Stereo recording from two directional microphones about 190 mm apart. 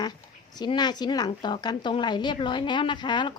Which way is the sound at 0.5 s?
20° left (ahead or behind).